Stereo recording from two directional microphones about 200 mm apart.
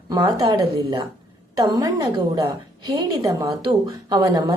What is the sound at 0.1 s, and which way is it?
A woman's voice, 20° right (ahead or behind).